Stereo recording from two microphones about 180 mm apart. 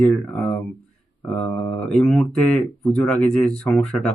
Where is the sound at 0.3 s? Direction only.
10° left (ahead or behind).